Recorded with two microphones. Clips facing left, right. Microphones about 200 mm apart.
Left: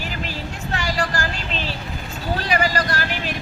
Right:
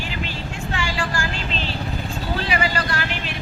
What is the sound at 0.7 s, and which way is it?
Vehicle, 40° left (ahead or behind).